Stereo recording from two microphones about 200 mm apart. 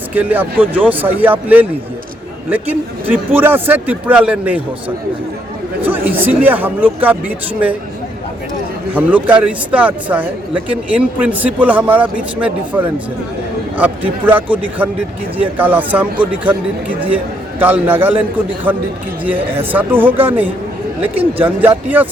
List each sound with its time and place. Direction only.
0.1 s speech: 10° right (ahead or behind)
5.8 s speech: 10° right (ahead or behind)
8.9 s speech: 10° right (ahead or behind)
13.8 s speech: 10° right (ahead or behind)
17.6 s speech: 10° right (ahead or behind)
19.4 s speech: 25° right (ahead or behind)
19.7 s speech: 10° right (ahead or behind)